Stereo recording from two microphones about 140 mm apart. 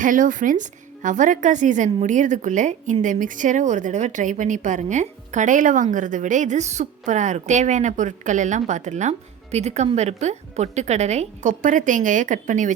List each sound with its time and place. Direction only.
0.0 s a woman's voice: 70° right (ahead or behind)